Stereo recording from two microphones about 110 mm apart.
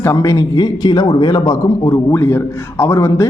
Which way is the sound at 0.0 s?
30° left (ahead or behind).